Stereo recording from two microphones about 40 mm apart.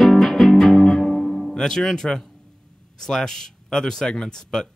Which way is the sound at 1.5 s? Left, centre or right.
Centre.